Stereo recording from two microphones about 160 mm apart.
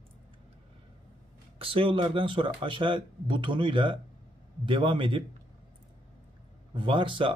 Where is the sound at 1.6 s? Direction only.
35° right (ahead or behind).